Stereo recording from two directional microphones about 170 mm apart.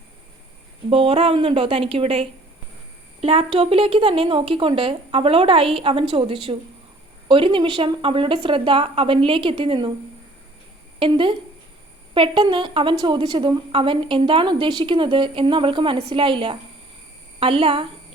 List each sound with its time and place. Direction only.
0.9 s a woman's voice: 35° right (ahead or behind)
11.0 s a woman's voice: 30° right (ahead or behind)